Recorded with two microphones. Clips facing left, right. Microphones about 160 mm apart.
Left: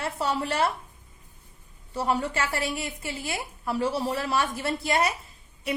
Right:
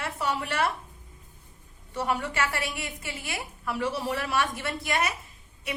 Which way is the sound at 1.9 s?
30° left (ahead or behind).